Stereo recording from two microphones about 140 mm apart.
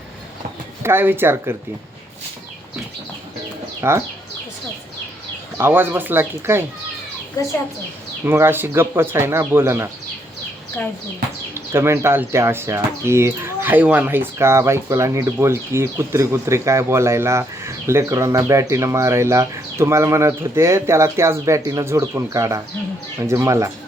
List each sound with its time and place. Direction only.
0.8 s speech: 15° right (ahead or behind)
3.8 s speech: 20° right (ahead or behind)
5.5 s speech: 15° right (ahead or behind)
8.2 s speech: 15° right (ahead or behind)
11.5 s speech: 20° right (ahead or behind)